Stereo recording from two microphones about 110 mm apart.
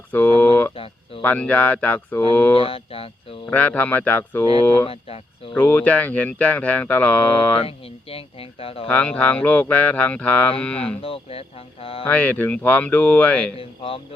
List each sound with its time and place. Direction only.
0.1 s a sound: 15° left (ahead or behind)
1.2 s speech: 15° left (ahead or behind)
2.6 s speech: 60° left (ahead or behind)
3.4 s speech: 15° left (ahead or behind)
4.9 s a sound: 60° left (ahead or behind)
5.5 s speech: 15° left (ahead or behind)
8.1 s speech: 60° left (ahead or behind)
8.9 s speech: 10° left (ahead or behind)
11.0 s speech: 60° left (ahead or behind)
12.0 s speech: 15° left (ahead or behind)
13.6 s speech: 60° left (ahead or behind)